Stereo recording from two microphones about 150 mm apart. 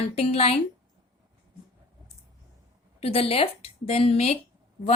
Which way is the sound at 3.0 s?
40° left (ahead or behind).